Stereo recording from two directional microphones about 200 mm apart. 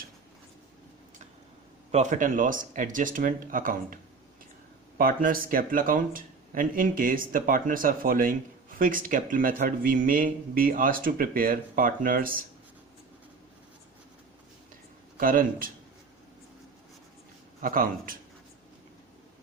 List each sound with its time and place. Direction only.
1.9 s speech: 35° right (ahead or behind)
4.9 s speech: 45° right (ahead or behind)
15.2 s speech: 45° right (ahead or behind)
17.6 s speech: 45° right (ahead or behind)